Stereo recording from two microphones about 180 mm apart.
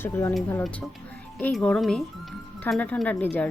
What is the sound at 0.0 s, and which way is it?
Speech, 10° left (ahead or behind).